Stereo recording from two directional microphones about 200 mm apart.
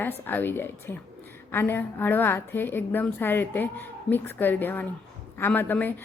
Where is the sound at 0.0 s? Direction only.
10° left (ahead or behind).